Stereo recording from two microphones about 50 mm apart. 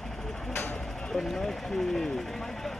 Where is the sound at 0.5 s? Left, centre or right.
Left.